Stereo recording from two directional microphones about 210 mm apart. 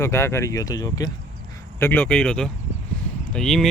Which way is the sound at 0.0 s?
10° left (ahead or behind).